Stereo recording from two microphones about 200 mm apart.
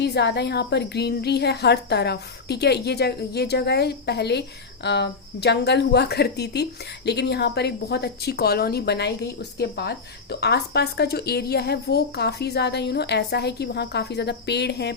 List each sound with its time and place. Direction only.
0.0 s a woman's voice: 55° left (ahead or behind)